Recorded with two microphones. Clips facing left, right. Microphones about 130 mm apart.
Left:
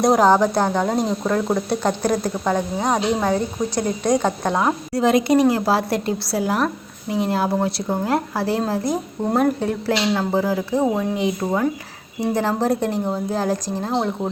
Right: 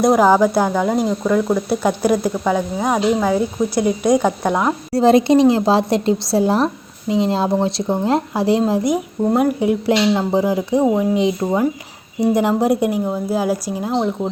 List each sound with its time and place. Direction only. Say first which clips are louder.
0.0 s a woman's voice: right 2 dB; 5° right (ahead or behind)
4.9 s a woman's voice: right 5 dB; 30° right (ahead or behind); by 13.9 s 10° right (ahead or behind)